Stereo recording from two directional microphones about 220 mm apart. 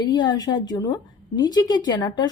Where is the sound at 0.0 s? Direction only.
20° left (ahead or behind).